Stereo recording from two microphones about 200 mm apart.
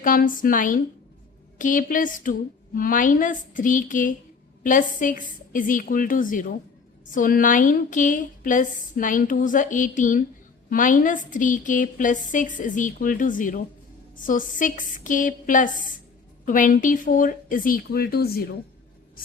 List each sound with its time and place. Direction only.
0.0 s a woman's voice: 45° left (ahead or behind)